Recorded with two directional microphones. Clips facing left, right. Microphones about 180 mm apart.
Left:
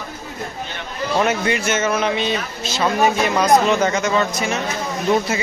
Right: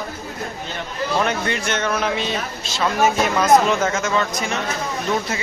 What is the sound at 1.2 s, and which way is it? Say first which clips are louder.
Speech: left 5 dB; 5° left (ahead or behind).